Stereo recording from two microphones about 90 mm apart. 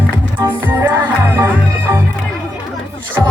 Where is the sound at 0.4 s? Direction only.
25° right (ahead or behind).